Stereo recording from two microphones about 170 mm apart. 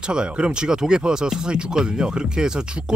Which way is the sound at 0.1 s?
5° right (ahead or behind).